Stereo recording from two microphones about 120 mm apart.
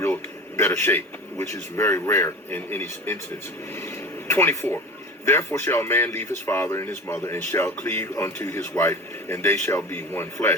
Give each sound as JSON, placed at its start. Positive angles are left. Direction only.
{"t": 0.5, "sound": "a man's voice", "side_deg": 25}